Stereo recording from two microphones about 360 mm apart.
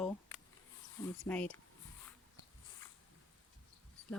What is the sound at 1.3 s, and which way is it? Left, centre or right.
Speech, centre.